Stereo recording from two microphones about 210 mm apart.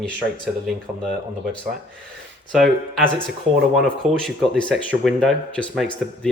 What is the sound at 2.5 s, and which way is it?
Speech, 5° left (ahead or behind).